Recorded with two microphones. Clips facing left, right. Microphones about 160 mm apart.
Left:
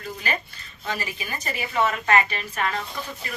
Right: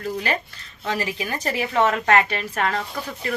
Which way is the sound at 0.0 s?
70° right (ahead or behind).